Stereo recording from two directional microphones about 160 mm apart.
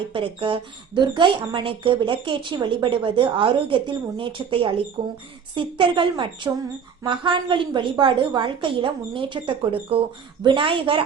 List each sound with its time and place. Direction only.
0.1 s a woman's voice: 30° right (ahead or behind)